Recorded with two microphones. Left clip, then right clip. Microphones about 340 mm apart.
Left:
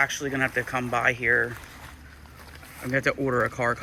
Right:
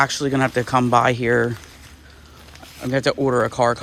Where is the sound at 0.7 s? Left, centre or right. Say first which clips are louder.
Right 10 dB; centre.